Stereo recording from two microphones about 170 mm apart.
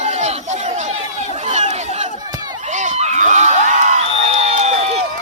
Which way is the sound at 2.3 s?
25° right (ahead or behind).